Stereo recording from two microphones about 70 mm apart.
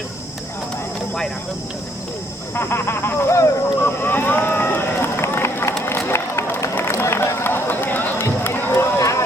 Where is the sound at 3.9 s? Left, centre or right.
Left.